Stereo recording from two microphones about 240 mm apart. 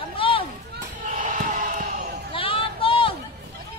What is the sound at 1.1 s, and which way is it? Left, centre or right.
Basketball bounce, right.